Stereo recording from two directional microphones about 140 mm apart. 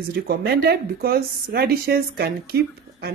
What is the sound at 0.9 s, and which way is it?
Speech, 90° right.